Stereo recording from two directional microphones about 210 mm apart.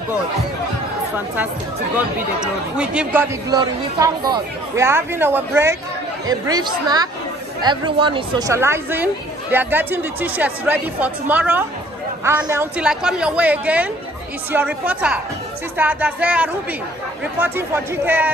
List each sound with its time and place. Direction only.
1.1 s speech: 10° right (ahead or behind)